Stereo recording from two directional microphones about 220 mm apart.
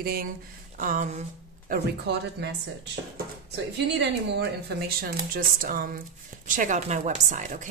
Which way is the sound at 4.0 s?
50° right (ahead or behind).